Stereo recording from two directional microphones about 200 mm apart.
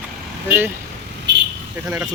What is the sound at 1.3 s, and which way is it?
Vehicle, 60° right (ahead or behind).